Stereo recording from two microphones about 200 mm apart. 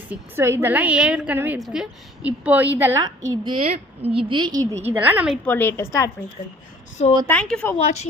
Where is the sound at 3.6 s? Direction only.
30° right (ahead or behind).